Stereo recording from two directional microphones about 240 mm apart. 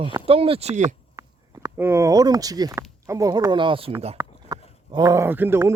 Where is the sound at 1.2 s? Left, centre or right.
Centre.